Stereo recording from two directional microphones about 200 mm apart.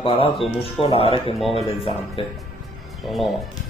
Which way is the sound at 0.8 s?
30° left (ahead or behind).